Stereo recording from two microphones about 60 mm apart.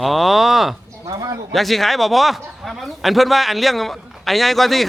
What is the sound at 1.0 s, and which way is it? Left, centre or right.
Speech, right.